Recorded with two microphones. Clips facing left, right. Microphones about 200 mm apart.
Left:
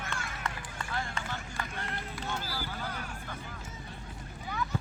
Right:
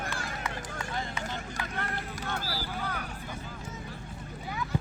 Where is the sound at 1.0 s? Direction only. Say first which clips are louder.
Right 1 dB; 20° right (ahead or behind).